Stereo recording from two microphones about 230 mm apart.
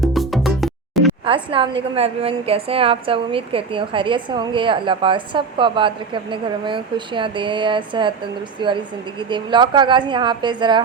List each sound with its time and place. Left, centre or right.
0.0 s music: centre
1.2 s a woman's voice: right